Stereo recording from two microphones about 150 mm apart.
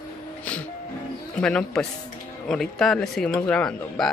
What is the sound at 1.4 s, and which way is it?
Speech, 5° left (ahead or behind).